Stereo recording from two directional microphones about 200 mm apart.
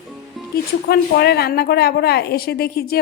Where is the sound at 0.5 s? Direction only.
50° left (ahead or behind).